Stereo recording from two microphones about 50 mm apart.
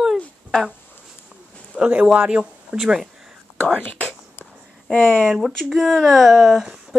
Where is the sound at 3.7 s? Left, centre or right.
Left.